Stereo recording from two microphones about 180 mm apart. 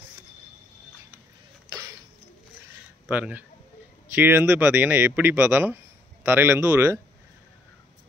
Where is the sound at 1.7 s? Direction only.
15° right (ahead or behind).